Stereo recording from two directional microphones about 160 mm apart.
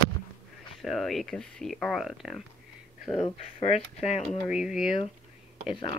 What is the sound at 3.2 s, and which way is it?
Speech, 40° left (ahead or behind).